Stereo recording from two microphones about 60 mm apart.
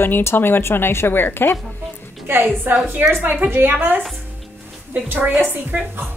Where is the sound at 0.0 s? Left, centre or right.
Left.